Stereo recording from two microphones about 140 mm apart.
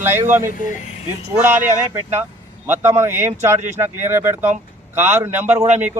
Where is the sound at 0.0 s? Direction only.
15° right (ahead or behind).